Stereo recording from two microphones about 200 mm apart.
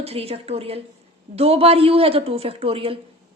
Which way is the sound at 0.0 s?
30° right (ahead or behind).